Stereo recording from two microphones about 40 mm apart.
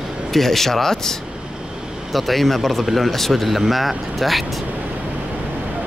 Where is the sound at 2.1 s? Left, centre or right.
Centre.